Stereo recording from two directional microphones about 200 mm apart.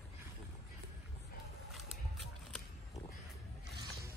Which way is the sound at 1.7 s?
Centre (ahead or behind).